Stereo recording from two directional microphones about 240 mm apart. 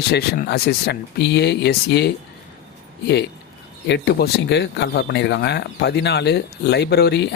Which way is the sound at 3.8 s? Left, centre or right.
Left.